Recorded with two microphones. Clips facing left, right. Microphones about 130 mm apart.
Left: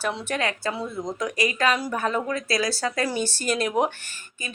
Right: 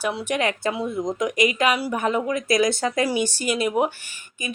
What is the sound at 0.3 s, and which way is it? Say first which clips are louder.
A woman's voice: right 3 dB; 20° right (ahead or behind).